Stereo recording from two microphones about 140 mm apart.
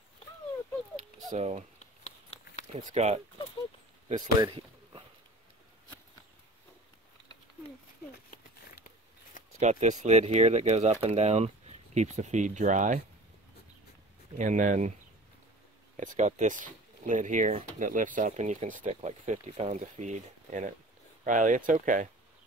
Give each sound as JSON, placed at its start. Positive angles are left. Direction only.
{"t": 1.4, "sound": "speech", "side_deg": -50}
{"t": 2.7, "sound": "speech", "side_deg": -60}
{"t": 4.4, "sound": "pigeon", "side_deg": -35}
{"t": 8.3, "sound": "a sound", "side_deg": 85}
{"t": 9.6, "sound": "speech", "side_deg": -55}
{"t": 14.3, "sound": "speech", "side_deg": -60}
{"t": 16.0, "sound": "speech", "side_deg": -65}